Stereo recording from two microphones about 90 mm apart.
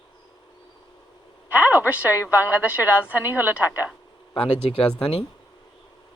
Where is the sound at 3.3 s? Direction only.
20° right (ahead or behind).